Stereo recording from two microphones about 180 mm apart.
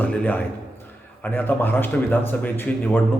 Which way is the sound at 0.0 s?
10° left (ahead or behind).